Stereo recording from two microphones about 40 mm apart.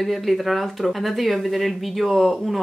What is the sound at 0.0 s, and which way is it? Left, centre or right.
Speech, centre.